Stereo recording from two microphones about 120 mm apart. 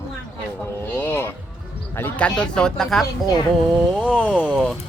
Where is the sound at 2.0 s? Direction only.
15° left (ahead or behind); by 4.2 s 5° right (ahead or behind).